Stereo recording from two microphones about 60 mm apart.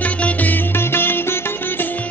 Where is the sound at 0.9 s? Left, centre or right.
Left.